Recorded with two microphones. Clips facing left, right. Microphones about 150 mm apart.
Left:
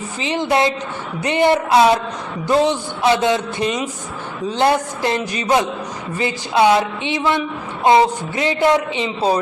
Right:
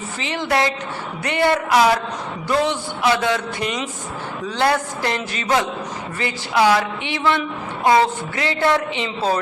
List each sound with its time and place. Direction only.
0.2 s a woman's voice: 20° left (ahead or behind)